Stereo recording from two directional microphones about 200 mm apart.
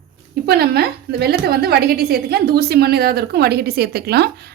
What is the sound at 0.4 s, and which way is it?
A woman's voice, 50° right (ahead or behind).